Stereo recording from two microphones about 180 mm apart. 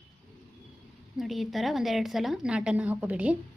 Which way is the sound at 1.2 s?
Centre (ahead or behind).